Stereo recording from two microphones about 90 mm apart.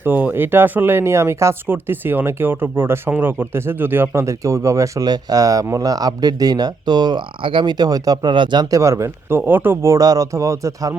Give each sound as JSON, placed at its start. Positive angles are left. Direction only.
{"t": 0.0, "sound": "speech", "side_deg": -20}
{"t": 5.0, "sound": "speech", "side_deg": -45}
{"t": 8.3, "sound": "speech", "side_deg": -60}
{"t": 8.7, "sound": "speech", "side_deg": -35}
{"t": 9.9, "sound": "speech", "side_deg": -40}